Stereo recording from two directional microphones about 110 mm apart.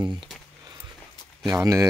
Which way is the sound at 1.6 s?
30° right (ahead or behind).